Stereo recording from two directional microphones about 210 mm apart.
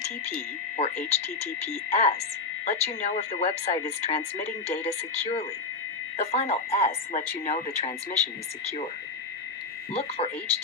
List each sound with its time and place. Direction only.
0.8 s speech: 30° left (ahead or behind)
9.9 s speech: 30° left (ahead or behind)